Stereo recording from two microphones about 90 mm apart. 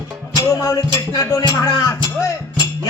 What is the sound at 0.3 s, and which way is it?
Music, 35° left (ahead or behind).